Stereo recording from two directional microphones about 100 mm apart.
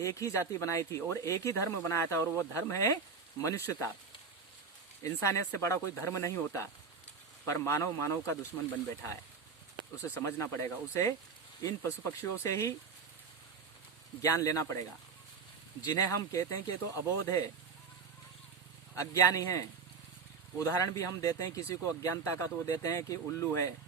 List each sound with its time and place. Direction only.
0.0 s speech: 35° left (ahead or behind)
5.0 s speech: 30° left (ahead or behind)
10.2 s speech: 25° left (ahead or behind)
14.2 s speech: 35° left (ahead or behind)
15.9 s speech: 35° left (ahead or behind)
18.9 s speech: 35° left (ahead or behind)